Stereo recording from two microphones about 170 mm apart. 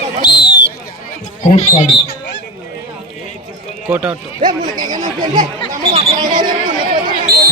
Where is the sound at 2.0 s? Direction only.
90° left.